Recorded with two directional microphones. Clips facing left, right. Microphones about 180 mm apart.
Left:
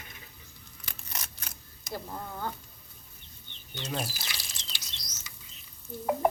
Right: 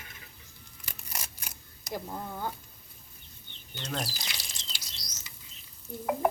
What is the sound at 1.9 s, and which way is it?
Speech, 15° right (ahead or behind).